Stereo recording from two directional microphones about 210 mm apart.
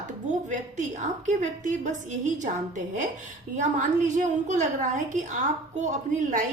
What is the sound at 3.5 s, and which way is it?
A woman's voice, 35° right (ahead or behind).